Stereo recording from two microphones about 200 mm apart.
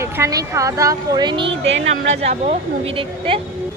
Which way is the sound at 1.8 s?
35° right (ahead or behind).